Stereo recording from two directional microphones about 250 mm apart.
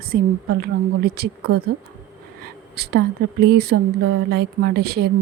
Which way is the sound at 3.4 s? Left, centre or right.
Right.